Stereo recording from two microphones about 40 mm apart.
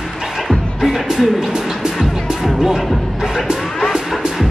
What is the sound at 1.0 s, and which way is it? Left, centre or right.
Speech, centre.